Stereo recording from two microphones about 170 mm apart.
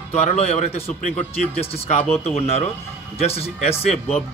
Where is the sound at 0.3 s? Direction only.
40° left (ahead or behind).